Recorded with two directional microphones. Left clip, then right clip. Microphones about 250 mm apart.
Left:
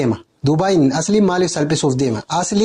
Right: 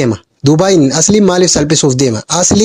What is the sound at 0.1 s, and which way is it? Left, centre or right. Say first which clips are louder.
Speech: right 7 dB; right.